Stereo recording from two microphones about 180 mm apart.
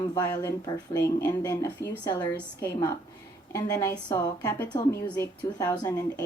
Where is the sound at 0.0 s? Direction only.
25° left (ahead or behind).